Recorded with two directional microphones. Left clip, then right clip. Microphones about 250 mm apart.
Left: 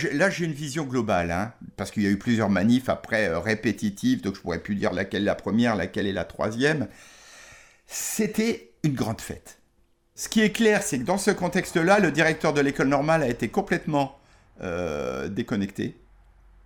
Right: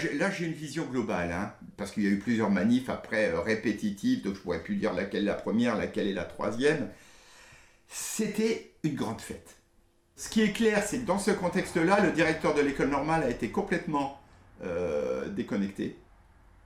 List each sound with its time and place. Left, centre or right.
0.0 s speech: left